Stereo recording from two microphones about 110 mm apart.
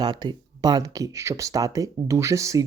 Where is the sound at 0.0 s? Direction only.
40° right (ahead or behind).